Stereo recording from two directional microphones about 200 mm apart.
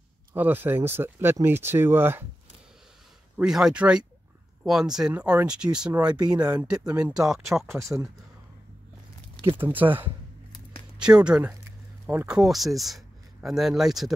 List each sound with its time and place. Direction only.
0.3 s speech: 10° right (ahead or behind)
3.3 s speech: 5° right (ahead or behind)
6.1 s speech: 20° right (ahead or behind)
7.0 s speech: 5° right (ahead or behind)
7.6 s speech: 10° right (ahead or behind)
9.6 s speech: 10° right (ahead or behind)
11.2 s speech: 5° right (ahead or behind)